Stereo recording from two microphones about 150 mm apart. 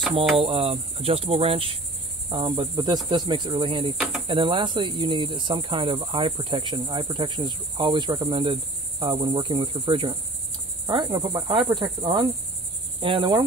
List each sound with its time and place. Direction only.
0.4 s cricket: 40° right (ahead or behind)